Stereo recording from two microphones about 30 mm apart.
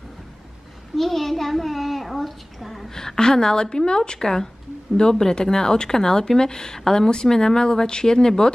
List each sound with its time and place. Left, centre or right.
0.9 s a child's voice: centre
2.9 s a woman's voice: centre
4.2 s a woman's voice: centre